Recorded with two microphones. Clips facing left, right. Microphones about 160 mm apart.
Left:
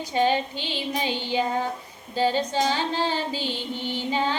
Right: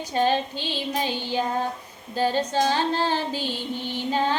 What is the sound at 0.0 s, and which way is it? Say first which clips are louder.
Music: even; 15° left (ahead or behind).